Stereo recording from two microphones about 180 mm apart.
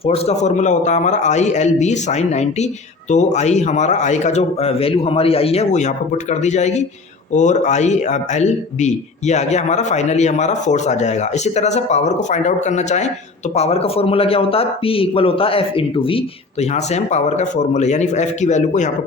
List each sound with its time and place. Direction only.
0.0 s a man's voice: 35° left (ahead or behind)